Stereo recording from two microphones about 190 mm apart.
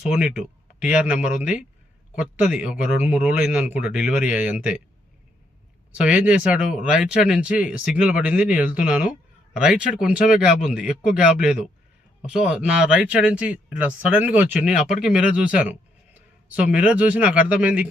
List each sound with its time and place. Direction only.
0.1 s speech: 5° right (ahead or behind)
6.0 s speech: 5° right (ahead or behind)